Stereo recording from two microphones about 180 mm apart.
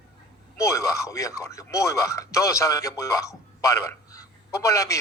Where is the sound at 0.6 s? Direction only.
15° left (ahead or behind).